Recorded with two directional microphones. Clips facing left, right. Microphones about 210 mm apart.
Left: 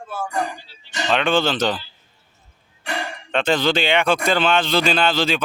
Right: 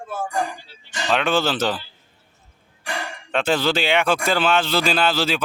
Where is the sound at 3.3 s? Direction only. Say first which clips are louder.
Left 1 dB; 5° right (ahead or behind).